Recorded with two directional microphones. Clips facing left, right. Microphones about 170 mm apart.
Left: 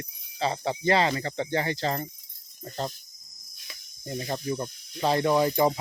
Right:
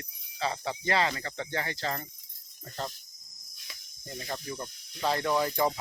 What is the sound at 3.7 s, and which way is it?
Speech, 20° left (ahead or behind).